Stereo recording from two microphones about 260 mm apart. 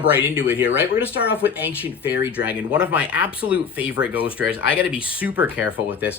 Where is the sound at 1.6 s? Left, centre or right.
Centre.